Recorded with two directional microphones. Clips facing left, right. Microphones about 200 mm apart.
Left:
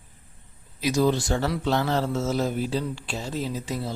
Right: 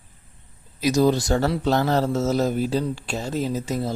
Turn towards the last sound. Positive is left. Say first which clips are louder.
# right 5 dB
turn(degrees=-45)  # may be behind; listen again after turning